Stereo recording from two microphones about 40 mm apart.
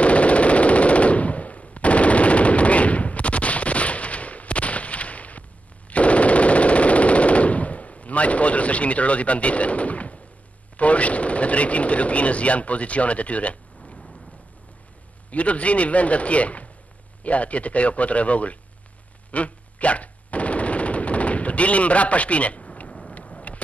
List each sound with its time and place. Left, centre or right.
0.0 s machine gun: left
10.8 s speech: left
15.3 s speech: left
19.3 s machine gun: left
23.1 s vehicle: left